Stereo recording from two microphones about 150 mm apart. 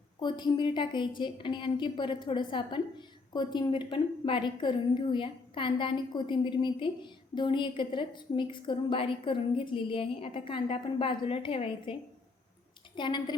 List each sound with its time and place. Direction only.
0.2 s a woman's voice: 30° left (ahead or behind)
13.0 s a woman's voice: 30° left (ahead or behind)